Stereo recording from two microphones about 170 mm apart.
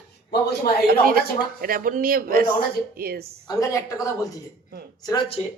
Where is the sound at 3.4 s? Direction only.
20° left (ahead or behind).